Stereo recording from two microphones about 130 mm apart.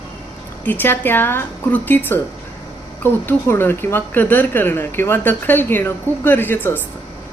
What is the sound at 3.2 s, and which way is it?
Speech, 15° left (ahead or behind).